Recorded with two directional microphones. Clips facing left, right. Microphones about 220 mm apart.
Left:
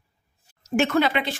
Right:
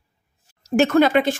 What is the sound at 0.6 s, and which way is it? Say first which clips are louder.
Speech: right 5 dB; 40° right (ahead or behind).